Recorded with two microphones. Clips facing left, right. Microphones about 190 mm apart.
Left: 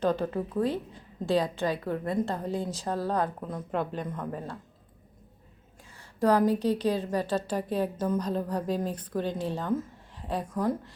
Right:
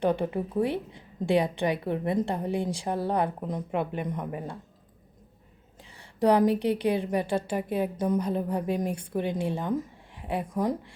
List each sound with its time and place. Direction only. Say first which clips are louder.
0.0 s a woman's voice: right 1 dB; 15° right (ahead or behind)
6.1 s a woman's voice: right 2 dB; 15° right (ahead or behind)